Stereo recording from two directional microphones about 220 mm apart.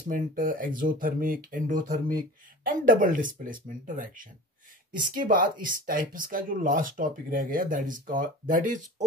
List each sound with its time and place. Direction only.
0.0 s speech: 40° right (ahead or behind)